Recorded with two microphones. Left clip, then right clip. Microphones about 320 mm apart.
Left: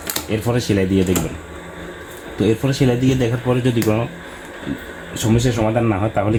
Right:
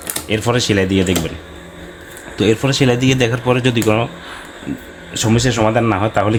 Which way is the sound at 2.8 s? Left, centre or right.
Right.